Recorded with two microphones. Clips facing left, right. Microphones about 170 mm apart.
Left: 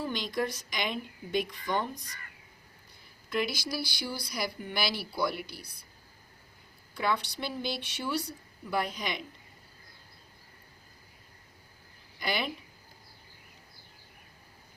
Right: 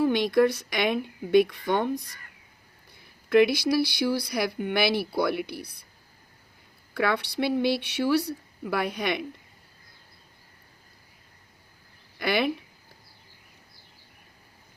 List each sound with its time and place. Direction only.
0.0 s speech: 65° right (ahead or behind)
3.2 s speech: 60° right (ahead or behind)
6.9 s speech: 65° right (ahead or behind)
12.2 s speech: 65° right (ahead or behind)